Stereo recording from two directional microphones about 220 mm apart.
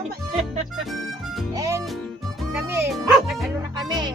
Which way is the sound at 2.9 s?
Centre (ahead or behind).